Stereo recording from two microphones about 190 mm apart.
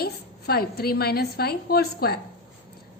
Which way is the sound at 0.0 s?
55° left (ahead or behind).